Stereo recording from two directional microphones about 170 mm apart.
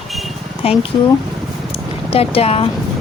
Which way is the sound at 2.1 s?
35° left (ahead or behind).